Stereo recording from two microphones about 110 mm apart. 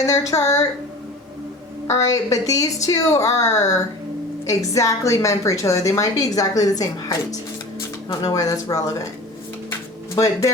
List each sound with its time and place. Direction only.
0.0 s a woman's voice: 30° left (ahead or behind)
1.9 s a woman's voice: 30° left (ahead or behind)